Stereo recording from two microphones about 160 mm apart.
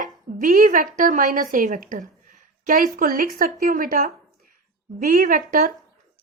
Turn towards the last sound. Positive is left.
turn(degrees=-60)  # may be behind; listen again after turning